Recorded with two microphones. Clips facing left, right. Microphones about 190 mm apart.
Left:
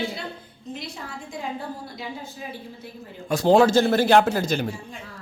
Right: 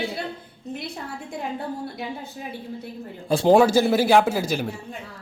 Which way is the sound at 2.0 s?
60° right (ahead or behind).